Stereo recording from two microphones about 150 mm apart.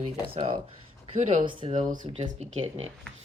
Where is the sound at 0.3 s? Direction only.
40° right (ahead or behind).